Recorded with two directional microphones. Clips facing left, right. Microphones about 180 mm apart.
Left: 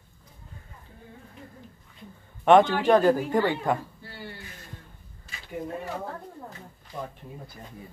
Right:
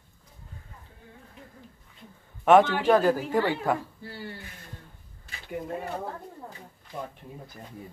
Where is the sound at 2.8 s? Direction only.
5° right (ahead or behind).